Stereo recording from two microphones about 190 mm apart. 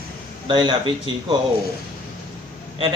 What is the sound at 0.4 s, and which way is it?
Speech, 25° right (ahead or behind).